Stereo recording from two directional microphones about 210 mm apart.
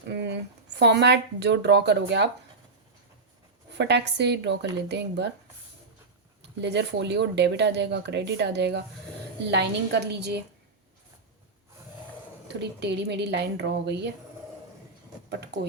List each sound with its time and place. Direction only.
0.1 s a sound: 55° right (ahead or behind)
0.8 s speech: 55° right (ahead or behind)
3.7 s speech: 55° right (ahead or behind)
6.4 s speech: 55° right (ahead or behind)
12.5 s speech: 55° right (ahead or behind)